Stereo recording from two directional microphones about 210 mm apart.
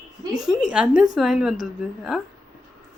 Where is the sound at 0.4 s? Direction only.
5° right (ahead or behind).